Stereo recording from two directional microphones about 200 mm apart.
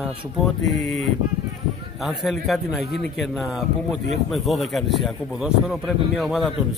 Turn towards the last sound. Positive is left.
turn(degrees=0)  # may be behind; listen again after turning